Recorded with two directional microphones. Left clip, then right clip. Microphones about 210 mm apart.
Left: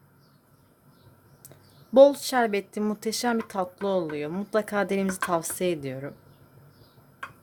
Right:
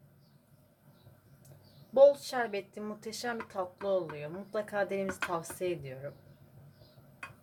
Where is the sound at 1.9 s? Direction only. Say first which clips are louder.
Left 6 dB; 50° left (ahead or behind).